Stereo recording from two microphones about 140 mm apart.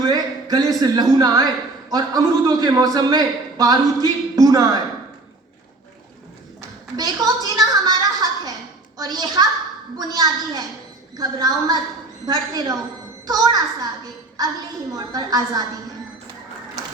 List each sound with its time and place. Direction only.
0.0 s a man's voice: 30° right (ahead or behind)
6.6 s a woman's voice: 30° right (ahead or behind)
14.0 s a sound: 25° right (ahead or behind)
14.9 s a man's voice: 25° right (ahead or behind)